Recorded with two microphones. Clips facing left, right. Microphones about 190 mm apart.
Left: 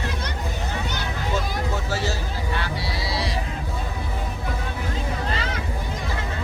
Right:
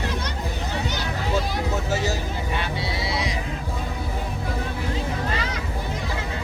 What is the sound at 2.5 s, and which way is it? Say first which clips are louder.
Sheep: right 1 dB; 20° right (ahead or behind).